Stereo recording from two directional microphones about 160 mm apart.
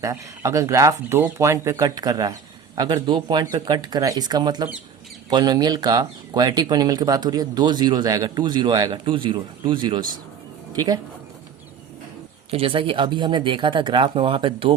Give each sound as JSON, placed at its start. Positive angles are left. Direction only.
{"t": 0.0, "sound": "speech", "side_deg": -20}
{"t": 12.5, "sound": "speech", "side_deg": -35}